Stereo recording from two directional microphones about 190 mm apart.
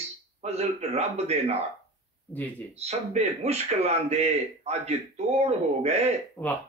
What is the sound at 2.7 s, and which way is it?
A man's voice, 35° right (ahead or behind).